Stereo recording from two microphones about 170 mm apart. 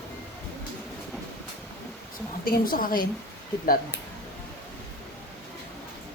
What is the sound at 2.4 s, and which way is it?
Speech, 55° left (ahead or behind).